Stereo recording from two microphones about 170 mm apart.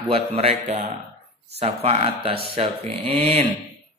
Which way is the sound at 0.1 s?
35° right (ahead or behind).